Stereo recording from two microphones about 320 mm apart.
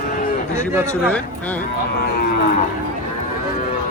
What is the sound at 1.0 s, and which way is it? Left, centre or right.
Speech, centre.